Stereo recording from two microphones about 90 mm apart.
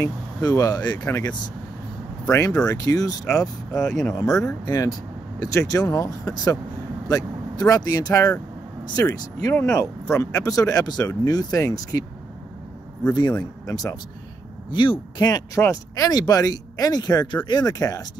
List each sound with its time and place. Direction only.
0.0 s speech: 45° left (ahead or behind)
13.1 s speech: 50° left (ahead or behind)
14.7 s speech: 60° left (ahead or behind); by 18.0 s 45° left (ahead or behind)